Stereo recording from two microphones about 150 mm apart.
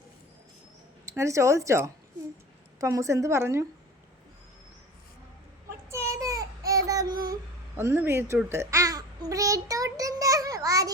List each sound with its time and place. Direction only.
1.0 s speech: 20° right (ahead or behind)
5.9 s child singing: 20° right (ahead or behind)
7.8 s speech: 15° right (ahead or behind)
9.3 s child singing: 20° right (ahead or behind)